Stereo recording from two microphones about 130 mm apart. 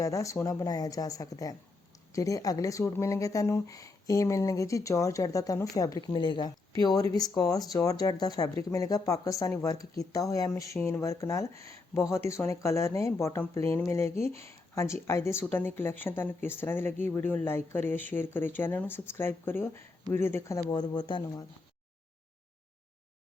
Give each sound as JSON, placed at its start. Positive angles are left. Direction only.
{"t": 0.0, "sound": "speech", "side_deg": 25}
{"t": 6.1, "sound": "speech", "side_deg": 40}
{"t": 11.5, "sound": "speech", "side_deg": -55}
{"t": 12.1, "sound": "speech", "side_deg": 20}
{"t": 20.7, "sound": "speech", "side_deg": 30}